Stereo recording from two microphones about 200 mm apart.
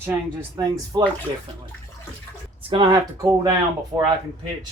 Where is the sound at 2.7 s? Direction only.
20° right (ahead or behind).